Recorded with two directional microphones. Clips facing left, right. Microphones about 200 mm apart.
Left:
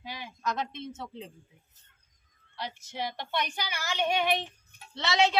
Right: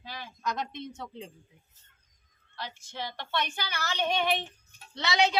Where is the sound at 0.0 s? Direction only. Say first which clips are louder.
Left 1 dB; 15° left (ahead or behind).